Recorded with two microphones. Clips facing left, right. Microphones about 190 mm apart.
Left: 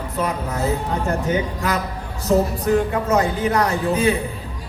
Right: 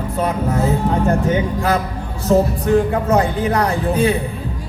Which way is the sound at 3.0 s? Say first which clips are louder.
Right 2 dB; 35° right (ahead or behind).